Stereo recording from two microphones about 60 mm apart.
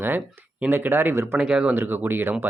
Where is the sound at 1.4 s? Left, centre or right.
Centre.